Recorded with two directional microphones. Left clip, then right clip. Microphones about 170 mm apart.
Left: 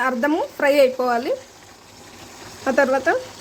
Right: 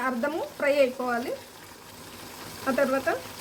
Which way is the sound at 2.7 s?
75° left (ahead or behind).